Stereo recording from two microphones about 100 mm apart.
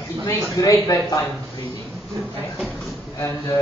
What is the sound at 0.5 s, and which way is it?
Speech, 35° left (ahead or behind).